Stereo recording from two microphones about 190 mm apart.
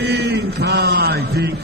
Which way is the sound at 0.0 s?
60° right (ahead or behind).